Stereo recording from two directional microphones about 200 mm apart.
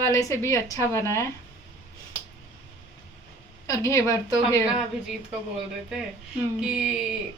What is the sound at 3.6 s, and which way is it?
Speech, 15° left (ahead or behind).